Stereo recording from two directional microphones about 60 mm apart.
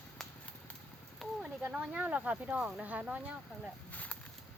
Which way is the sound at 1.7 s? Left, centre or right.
Centre.